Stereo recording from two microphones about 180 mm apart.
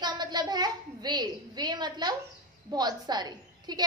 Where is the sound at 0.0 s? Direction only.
25° right (ahead or behind).